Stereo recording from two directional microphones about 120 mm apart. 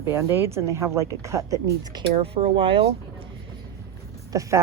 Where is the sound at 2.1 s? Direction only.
55° right (ahead or behind).